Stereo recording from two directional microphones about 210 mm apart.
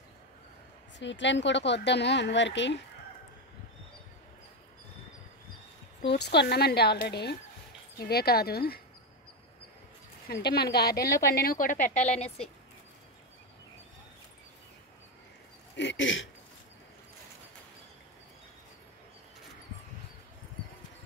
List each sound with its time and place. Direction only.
0.9 s a woman's voice: 60° left (ahead or behind)
6.0 s speech: 50° left (ahead or behind)
10.2 s a woman's voice: 50° left (ahead or behind)
15.7 s speech: 60° left (ahead or behind)